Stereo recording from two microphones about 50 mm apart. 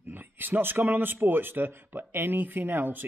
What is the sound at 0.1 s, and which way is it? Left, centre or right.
Speech, right.